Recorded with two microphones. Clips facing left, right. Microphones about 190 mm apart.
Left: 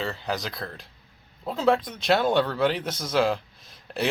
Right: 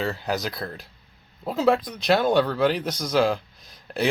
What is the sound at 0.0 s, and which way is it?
A man's voice, 5° right (ahead or behind).